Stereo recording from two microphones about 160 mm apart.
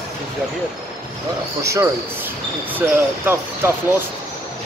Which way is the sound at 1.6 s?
20° right (ahead or behind).